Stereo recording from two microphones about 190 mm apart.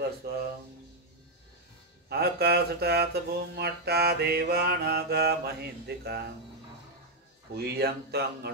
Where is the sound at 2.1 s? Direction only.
55° right (ahead or behind).